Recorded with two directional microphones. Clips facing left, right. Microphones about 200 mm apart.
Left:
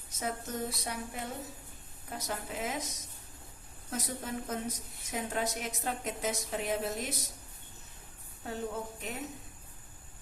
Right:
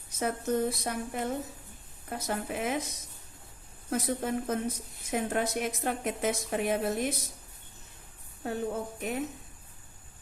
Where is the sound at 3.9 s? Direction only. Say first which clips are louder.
Right 7 dB; 60° right (ahead or behind).